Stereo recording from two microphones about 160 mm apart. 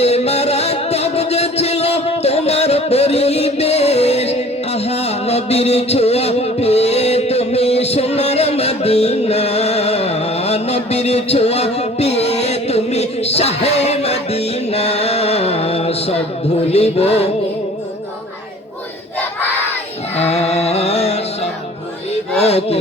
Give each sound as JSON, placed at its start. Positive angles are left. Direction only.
{"t": 0.0, "sound": "music", "side_deg": 40}
{"t": 20.1, "sound": "music", "side_deg": 40}
{"t": 22.4, "sound": "music", "side_deg": 40}